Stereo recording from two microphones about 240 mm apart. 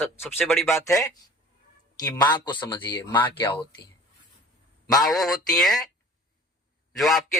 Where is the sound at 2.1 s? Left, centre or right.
Centre.